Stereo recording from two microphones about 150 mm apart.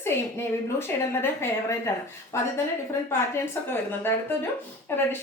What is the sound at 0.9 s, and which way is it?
A woman's voice, 10° left (ahead or behind).